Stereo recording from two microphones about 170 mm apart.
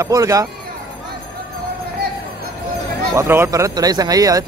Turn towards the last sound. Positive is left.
turn(degrees=-20)  # may be behind; listen again after turning